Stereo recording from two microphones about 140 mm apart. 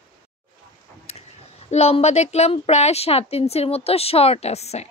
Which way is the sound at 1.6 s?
50° left (ahead or behind).